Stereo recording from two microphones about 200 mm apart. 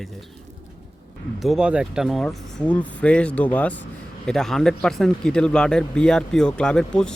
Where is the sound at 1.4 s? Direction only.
Centre (ahead or behind).